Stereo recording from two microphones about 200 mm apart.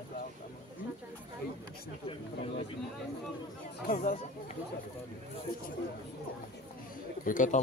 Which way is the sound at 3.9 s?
35° left (ahead or behind).